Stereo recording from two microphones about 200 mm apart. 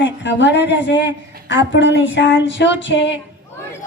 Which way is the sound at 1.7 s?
65° left (ahead or behind).